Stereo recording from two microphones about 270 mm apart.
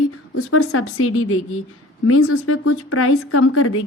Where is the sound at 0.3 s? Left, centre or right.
Left.